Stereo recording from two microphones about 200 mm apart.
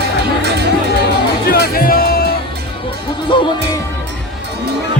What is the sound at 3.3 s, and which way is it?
Music, 25° left (ahead or behind).